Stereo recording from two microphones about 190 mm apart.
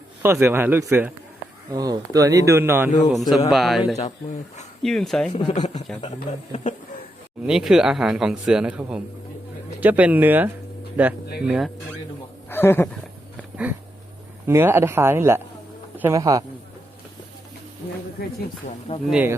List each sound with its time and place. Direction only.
0.2 s speech: 10° right (ahead or behind)
2.9 s speech: 40° left (ahead or behind)
3.2 s speech: centre (ahead or behind)
3.9 s speech: 40° left (ahead or behind)
4.8 s speech: centre (ahead or behind)
5.5 s speech: 35° left (ahead or behind)
7.4 s speech: 5° right (ahead or behind)
12.5 s speech: 10° left (ahead or behind)
14.4 s a man's voice: 10° right (ahead or behind)
19.0 s speech: 5° right (ahead or behind)